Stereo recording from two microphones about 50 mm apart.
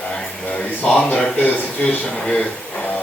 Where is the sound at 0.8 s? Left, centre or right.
Left.